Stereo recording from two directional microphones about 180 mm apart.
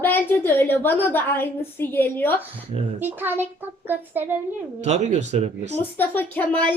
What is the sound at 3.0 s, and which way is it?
A child's voice, 10° right (ahead or behind).